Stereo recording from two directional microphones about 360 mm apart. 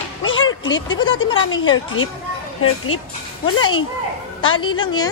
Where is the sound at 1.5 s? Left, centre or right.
Left.